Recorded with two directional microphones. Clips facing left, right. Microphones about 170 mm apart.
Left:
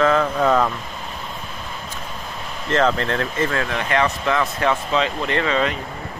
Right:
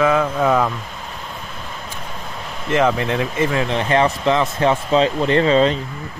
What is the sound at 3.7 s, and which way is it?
Speech, 30° right (ahead or behind).